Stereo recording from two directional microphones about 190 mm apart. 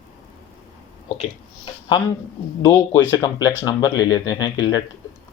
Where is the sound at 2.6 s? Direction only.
15° left (ahead or behind).